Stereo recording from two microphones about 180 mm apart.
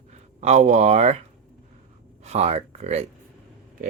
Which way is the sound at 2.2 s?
35° right (ahead or behind).